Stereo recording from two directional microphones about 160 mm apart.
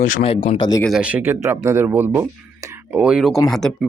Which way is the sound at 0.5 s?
25° left (ahead or behind).